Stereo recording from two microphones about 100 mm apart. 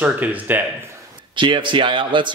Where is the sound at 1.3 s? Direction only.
55° right (ahead or behind).